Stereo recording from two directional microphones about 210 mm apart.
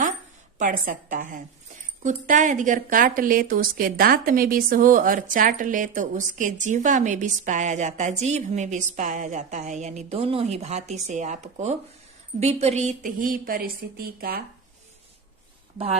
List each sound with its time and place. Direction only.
0.6 s speech: 40° right (ahead or behind)